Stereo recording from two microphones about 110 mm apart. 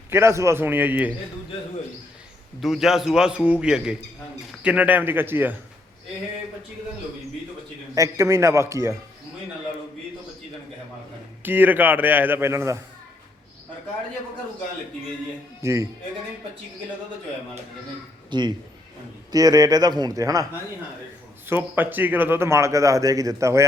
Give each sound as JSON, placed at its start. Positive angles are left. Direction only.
{"t": 0.1, "sound": "speech", "side_deg": -25}
{"t": 2.6, "sound": "a man's voice", "side_deg": -5}
{"t": 7.9, "sound": "speech", "side_deg": -30}
{"t": 11.4, "sound": "a man's voice", "side_deg": -15}
{"t": 15.6, "sound": "speech", "side_deg": -25}
{"t": 18.3, "sound": "a man's voice", "side_deg": -45}
{"t": 21.4, "sound": "speech", "side_deg": -20}